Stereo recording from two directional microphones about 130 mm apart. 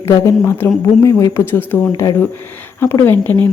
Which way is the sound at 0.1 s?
20° left (ahead or behind).